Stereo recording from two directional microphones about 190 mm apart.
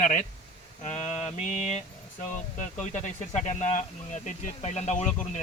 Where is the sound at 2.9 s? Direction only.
40° left (ahead or behind).